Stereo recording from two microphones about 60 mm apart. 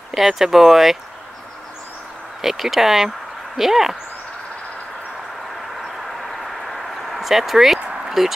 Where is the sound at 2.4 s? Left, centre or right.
Centre.